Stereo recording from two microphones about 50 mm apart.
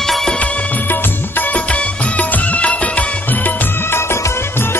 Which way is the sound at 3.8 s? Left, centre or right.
Left.